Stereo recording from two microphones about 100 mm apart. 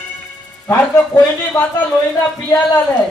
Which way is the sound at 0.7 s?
25° left (ahead or behind).